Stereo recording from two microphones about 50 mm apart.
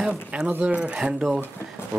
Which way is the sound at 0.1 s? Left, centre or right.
Right.